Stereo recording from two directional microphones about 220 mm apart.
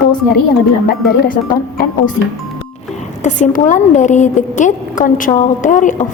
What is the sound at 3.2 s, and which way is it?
A woman's voice, 35° left (ahead or behind).